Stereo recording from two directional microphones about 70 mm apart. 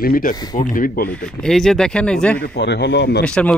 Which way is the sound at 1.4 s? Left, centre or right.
Centre.